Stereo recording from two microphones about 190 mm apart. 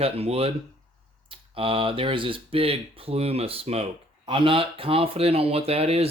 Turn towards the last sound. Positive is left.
turn(degrees=-30)  # may be behind; listen again after turning